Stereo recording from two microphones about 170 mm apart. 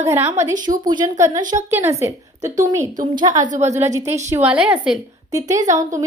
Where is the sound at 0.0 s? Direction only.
15° right (ahead or behind).